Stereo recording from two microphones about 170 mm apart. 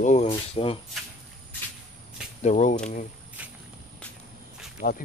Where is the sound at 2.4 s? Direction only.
45° left (ahead or behind).